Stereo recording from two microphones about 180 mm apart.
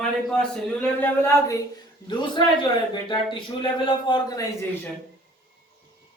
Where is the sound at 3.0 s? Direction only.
25° left (ahead or behind).